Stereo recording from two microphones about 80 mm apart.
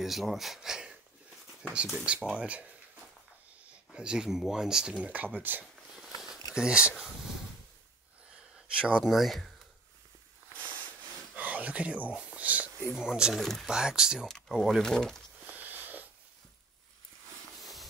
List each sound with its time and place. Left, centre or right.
0.0 s speech: centre
3.9 s speech: centre
6.5 s speech: centre
8.5 s speech: centre
9.1 s speech: centre
11.3 s speech: centre
13.4 s speech: centre
13.7 s speech: centre
14.8 s speech: centre
15.4 s sniff: right
17.6 s hiss: centre